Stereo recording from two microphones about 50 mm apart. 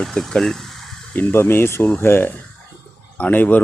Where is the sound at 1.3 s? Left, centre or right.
Left.